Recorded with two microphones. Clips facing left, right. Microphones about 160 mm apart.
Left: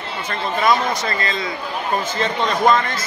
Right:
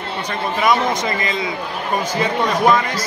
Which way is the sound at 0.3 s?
10° right (ahead or behind).